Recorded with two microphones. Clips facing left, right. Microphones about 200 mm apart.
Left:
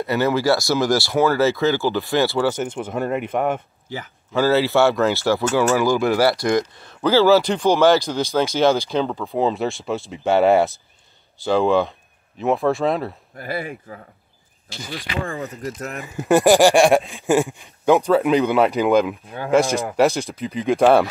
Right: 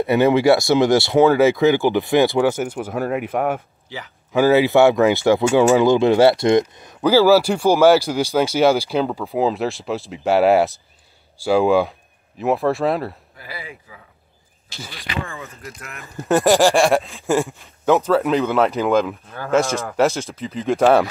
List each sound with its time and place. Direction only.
0.0 s speech: 20° right (ahead or behind)
2.7 s speech: 5° right (ahead or behind)
4.3 s speech: 15° right (ahead or behind)
13.4 s speech: 50° left (ahead or behind)
15.2 s speech: 35° left (ahead or behind)
16.1 s speech: 5° left (ahead or behind)
20.7 s speech: centre (ahead or behind)